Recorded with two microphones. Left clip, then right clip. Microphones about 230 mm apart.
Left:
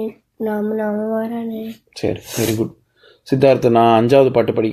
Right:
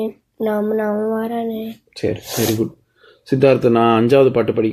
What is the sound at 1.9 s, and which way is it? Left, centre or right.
Speech, left.